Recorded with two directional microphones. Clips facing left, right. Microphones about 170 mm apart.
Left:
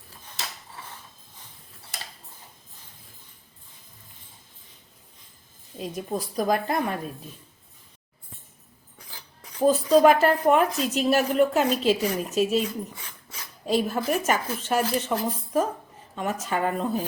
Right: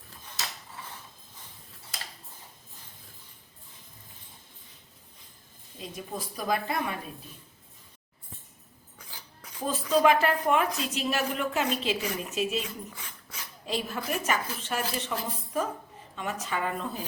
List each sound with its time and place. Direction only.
5.8 s a woman's voice: 45° left (ahead or behind)
9.6 s a woman's voice: 40° left (ahead or behind)
13.7 s a woman's voice: 40° left (ahead or behind)